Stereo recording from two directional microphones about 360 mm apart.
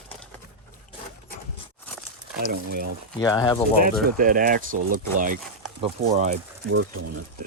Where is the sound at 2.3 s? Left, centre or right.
Right.